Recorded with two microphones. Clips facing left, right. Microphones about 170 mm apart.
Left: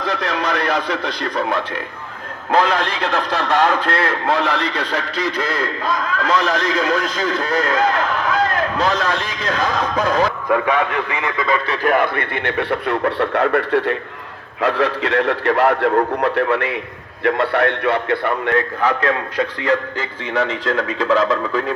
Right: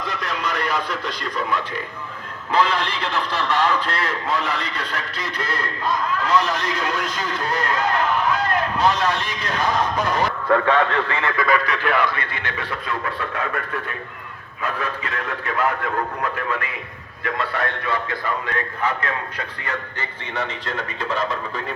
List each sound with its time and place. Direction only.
0.0 s a man's voice: 80° left
2.5 s a man's voice: 50° left (ahead or behind); by 10.0 s 90° left
10.5 s speech: 10° left (ahead or behind)
11.8 s a man's voice: 45° left (ahead or behind); by 21.6 s 90° left